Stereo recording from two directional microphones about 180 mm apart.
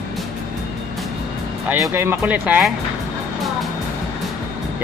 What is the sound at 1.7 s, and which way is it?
Speech, 10° right (ahead or behind).